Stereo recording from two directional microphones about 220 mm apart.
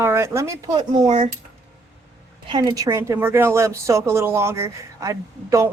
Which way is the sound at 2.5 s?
20° right (ahead or behind).